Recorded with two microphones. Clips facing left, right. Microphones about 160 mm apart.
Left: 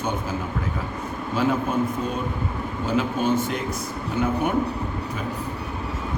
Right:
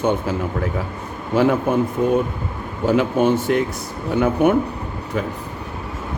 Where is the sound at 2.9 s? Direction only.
65° right (ahead or behind).